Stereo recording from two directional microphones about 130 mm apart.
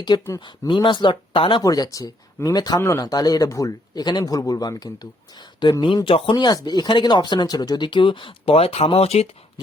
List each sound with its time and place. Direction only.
0.3 s speech: 35° left (ahead or behind)
1.6 s speech: 25° left (ahead or behind); by 9.2 s 50° left (ahead or behind)